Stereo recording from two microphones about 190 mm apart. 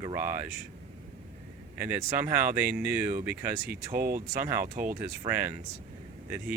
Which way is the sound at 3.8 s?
50° right (ahead or behind).